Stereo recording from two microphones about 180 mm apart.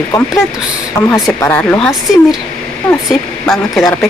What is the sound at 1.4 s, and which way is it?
Speech, 10° left (ahead or behind).